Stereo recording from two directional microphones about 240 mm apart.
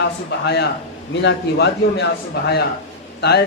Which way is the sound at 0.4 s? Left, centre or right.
Left.